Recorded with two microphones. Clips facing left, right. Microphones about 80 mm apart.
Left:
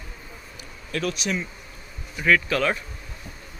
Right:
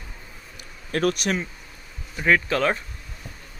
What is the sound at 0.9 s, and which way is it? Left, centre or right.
Speech, right.